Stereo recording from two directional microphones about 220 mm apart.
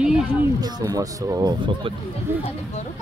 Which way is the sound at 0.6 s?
15° right (ahead or behind).